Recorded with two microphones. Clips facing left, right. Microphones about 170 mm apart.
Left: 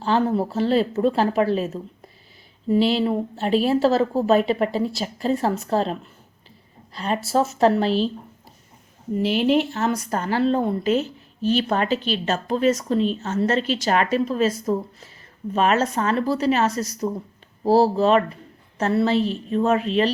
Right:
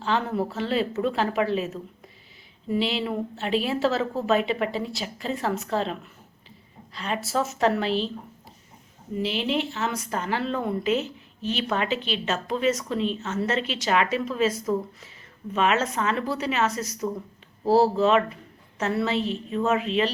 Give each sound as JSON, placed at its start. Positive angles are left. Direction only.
{"t": 0.0, "sound": "speech", "side_deg": 35}
{"t": 9.1, "sound": "speech", "side_deg": 45}
{"t": 11.4, "sound": "speech", "side_deg": 40}